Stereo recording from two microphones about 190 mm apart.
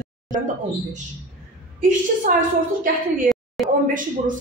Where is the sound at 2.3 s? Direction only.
45° right (ahead or behind).